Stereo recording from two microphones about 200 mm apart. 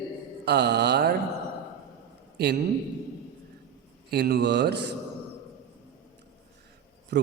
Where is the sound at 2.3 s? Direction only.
55° right (ahead or behind).